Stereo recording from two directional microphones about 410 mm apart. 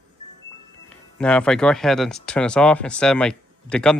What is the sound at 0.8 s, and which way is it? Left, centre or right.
Speech, centre.